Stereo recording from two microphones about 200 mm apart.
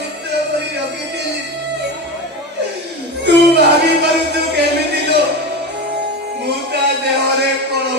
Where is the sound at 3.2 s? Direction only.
55° right (ahead or behind).